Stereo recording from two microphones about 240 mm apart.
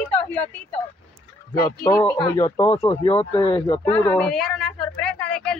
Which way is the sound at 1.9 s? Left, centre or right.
Centre.